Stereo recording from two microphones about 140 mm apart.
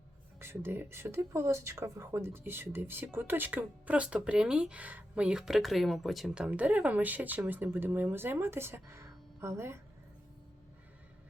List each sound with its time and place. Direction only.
0.3 s speech: 15° right (ahead or behind)